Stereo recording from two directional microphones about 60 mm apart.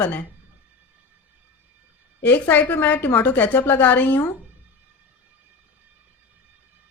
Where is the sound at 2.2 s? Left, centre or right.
Left.